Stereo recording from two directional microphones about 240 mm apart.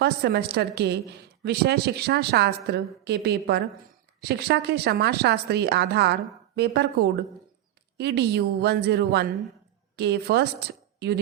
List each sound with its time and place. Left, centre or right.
0.0 s a woman's voice: right